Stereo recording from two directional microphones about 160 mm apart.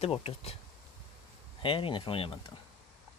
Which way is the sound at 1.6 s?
35° left (ahead or behind).